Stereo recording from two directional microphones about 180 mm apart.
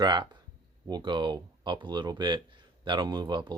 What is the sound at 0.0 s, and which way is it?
Speech, 25° right (ahead or behind).